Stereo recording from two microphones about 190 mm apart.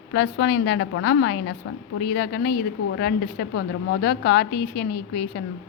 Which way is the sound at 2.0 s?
60° left (ahead or behind).